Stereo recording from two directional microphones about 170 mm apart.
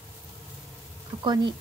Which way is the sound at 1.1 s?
25° right (ahead or behind).